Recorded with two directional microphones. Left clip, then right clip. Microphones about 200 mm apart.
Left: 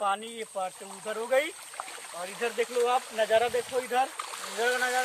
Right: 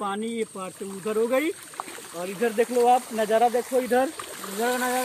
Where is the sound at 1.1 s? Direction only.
20° left (ahead or behind).